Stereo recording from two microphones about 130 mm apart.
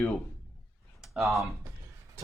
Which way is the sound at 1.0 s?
Centre (ahead or behind).